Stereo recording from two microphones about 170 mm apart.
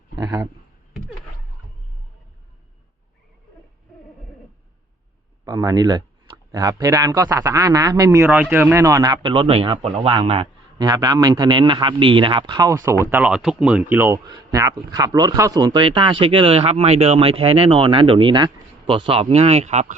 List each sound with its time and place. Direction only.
0.2 s a sound: 20° right (ahead or behind)
5.5 s speech: 20° right (ahead or behind)
10.8 s speech: 20° right (ahead or behind); by 20.0 s 40° right (ahead or behind)